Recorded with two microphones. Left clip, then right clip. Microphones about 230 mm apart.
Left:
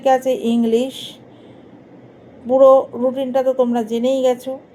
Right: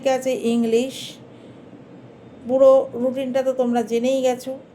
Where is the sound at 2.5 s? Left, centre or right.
Left.